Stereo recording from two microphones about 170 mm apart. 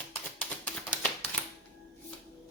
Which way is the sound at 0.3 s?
10° left (ahead or behind).